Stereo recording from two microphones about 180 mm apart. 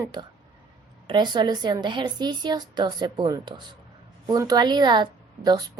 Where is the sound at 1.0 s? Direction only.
25° right (ahead or behind).